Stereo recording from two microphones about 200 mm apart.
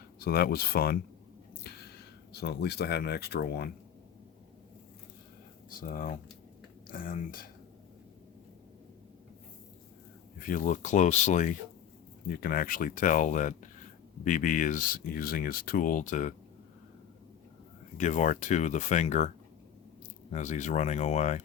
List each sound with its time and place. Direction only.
0.2 s speech: 50° left (ahead or behind)
1.7 s a sound: 55° left (ahead or behind)
2.3 s speech: 55° left (ahead or behind)
5.8 s speech: 45° left (ahead or behind)
10.4 s speech: 40° left (ahead or behind)
12.3 s speech: 45° left (ahead or behind)
17.9 s speech: 40° left (ahead or behind)
20.3 s speech: 35° left (ahead or behind)